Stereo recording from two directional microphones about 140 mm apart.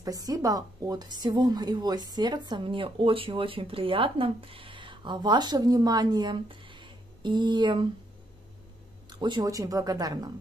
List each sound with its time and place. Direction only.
0.0 s a woman's voice: 25° right (ahead or behind)
9.2 s speech: 30° right (ahead or behind)